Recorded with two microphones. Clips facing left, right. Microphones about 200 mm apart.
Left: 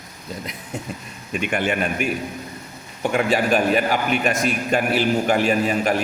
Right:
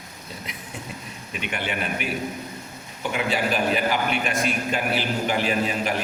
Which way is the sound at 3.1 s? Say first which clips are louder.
Left 5 dB; 50° left (ahead or behind).